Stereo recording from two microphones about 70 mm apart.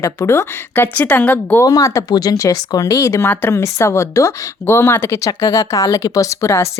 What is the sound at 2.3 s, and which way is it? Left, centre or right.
Speech, left.